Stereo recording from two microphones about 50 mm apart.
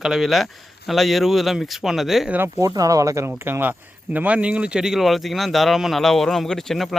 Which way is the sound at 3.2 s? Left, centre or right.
Right.